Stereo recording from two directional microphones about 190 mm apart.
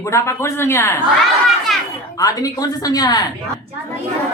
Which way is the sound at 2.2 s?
20° left (ahead or behind).